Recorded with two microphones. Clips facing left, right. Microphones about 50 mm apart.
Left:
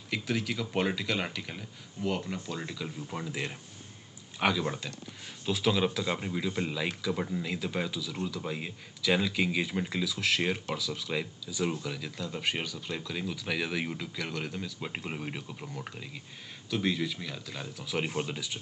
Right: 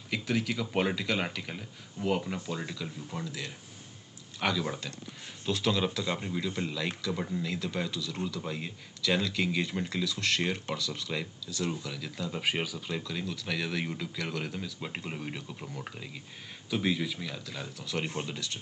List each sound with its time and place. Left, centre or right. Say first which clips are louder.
0.1 s speech: right 1 dB; centre
2.5 s speech: even; centre
3.1 s speech: left 5 dB; centre
4.4 s speech: left 2 dB; centre
12.2 s speech: right 3 dB; centre